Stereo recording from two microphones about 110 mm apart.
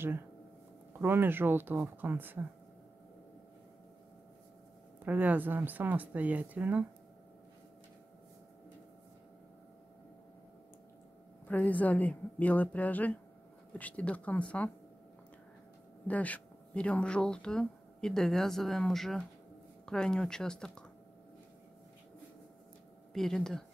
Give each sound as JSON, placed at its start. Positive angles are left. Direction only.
{"t": 1.0, "sound": "speech", "side_deg": -20}
{"t": 5.0, "sound": "speech", "side_deg": -15}
{"t": 11.4, "sound": "speech", "side_deg": 15}
{"t": 16.1, "sound": "speech", "side_deg": 15}
{"t": 23.1, "sound": "speech", "side_deg": 5}